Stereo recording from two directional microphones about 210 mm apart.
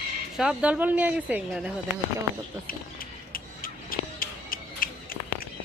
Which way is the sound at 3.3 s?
45° left (ahead or behind).